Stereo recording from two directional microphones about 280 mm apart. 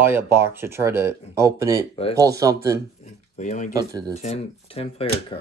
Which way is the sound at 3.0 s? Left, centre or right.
Left.